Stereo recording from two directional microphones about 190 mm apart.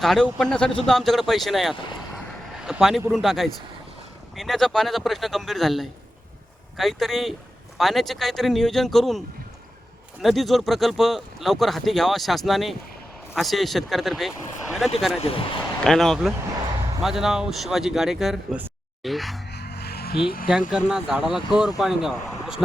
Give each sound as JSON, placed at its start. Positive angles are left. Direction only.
{"t": 0.0, "sound": "speech", "side_deg": 0}
{"t": 15.2, "sound": "speech", "side_deg": 30}
{"t": 15.8, "sound": "speech", "side_deg": 0}
{"t": 19.5, "sound": "music", "side_deg": 60}
{"t": 20.5, "sound": "speech", "side_deg": -5}